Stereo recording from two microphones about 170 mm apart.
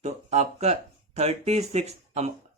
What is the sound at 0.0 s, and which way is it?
Speech, 40° right (ahead or behind).